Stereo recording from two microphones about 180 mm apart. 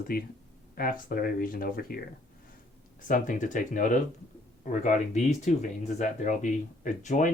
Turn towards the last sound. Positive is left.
turn(degrees=45)  # may be behind; listen again after turning